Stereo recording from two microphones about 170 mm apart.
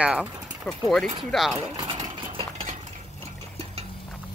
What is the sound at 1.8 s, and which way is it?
Engine, 25° right (ahead or behind).